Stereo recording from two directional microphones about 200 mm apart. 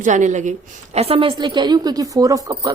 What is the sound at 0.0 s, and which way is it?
A woman's voice, 40° right (ahead or behind).